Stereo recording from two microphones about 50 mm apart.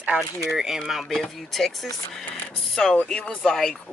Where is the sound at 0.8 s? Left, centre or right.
Centre; by 3.5 s left.